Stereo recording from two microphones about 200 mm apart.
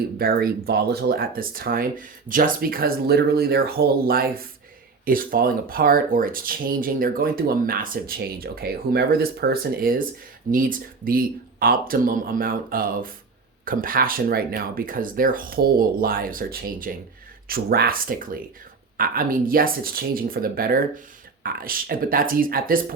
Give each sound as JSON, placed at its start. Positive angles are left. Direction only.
{"t": 0.2, "sound": "speech", "side_deg": -50}